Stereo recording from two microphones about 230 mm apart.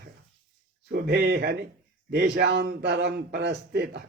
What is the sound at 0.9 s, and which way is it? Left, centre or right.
Speech, right.